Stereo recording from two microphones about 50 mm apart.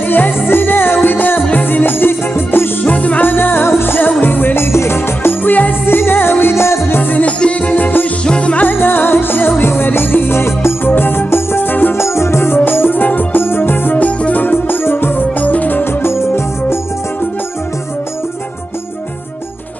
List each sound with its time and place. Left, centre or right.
0.1 s music: left
2.8 s music: left
4.6 s music: left
6.4 s music: left
7.0 s music: left
7.2 s music: left
7.7 s music: left
8.2 s music: centre
8.6 s music: left
12.0 s music: left
13.9 s music: left
15.4 s music: left
15.8 s music: left